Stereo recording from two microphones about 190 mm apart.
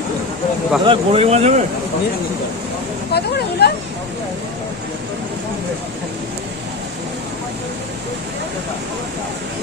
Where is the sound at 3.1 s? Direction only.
60° left (ahead or behind).